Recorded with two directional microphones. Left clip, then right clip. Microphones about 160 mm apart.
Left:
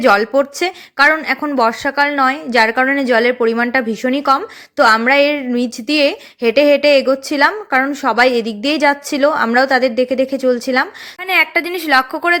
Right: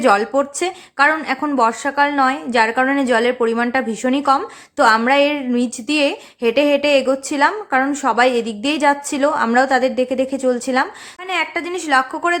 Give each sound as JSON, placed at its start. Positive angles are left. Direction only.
{"t": 0.0, "sound": "speech", "side_deg": 20}